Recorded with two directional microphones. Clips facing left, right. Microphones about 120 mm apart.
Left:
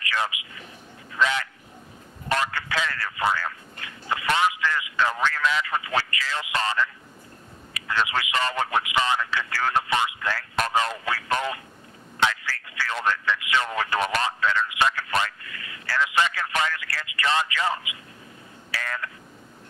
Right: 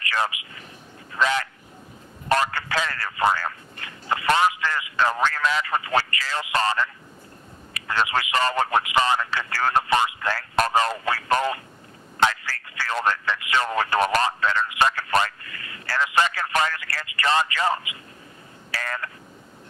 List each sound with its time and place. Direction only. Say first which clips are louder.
0.0 s speech: right 2 dB; 45° right (ahead or behind)
1.1 s a sound: right 1 dB; 40° right (ahead or behind)
2.2 s speech: right 4 dB; 40° right (ahead or behind)